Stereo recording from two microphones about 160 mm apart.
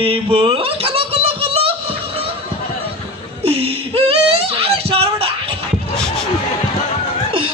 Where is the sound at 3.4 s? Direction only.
35° right (ahead or behind).